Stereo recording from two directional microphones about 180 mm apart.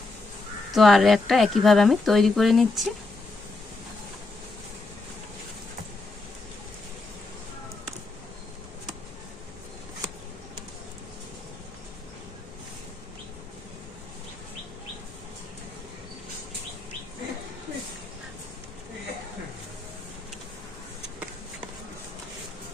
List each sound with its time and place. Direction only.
0.7 s a woman's voice: centre (ahead or behind)